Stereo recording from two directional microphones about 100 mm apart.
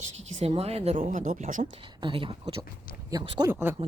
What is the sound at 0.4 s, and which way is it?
Speech, 90° right.